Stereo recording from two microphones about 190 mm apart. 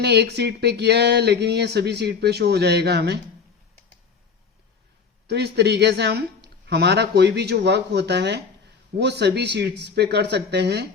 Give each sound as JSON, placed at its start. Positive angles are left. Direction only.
{"t": 0.0, "sound": "speech", "side_deg": -60}
{"t": 5.3, "sound": "speech", "side_deg": -60}